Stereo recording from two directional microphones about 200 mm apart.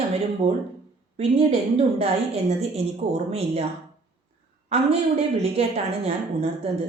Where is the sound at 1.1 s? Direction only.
30° right (ahead or behind).